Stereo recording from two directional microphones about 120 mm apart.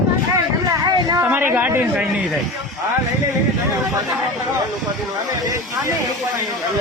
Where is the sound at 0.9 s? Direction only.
35° right (ahead or behind).